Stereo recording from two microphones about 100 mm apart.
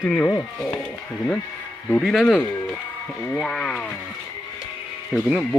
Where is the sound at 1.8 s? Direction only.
10° left (ahead or behind).